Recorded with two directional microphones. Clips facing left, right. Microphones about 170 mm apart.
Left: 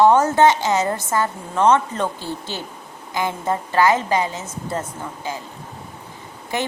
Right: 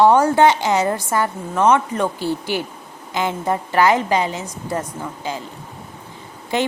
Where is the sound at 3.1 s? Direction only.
20° right (ahead or behind).